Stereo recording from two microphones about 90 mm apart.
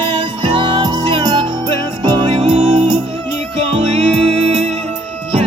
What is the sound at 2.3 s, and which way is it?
Music, 90° right.